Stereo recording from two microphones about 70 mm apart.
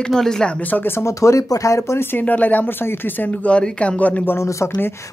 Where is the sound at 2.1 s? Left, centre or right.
Left.